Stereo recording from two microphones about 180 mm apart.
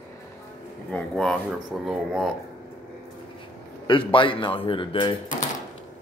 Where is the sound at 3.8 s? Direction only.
30° left (ahead or behind).